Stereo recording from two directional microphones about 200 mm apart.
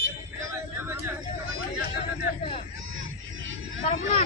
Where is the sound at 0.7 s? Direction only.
10° right (ahead or behind).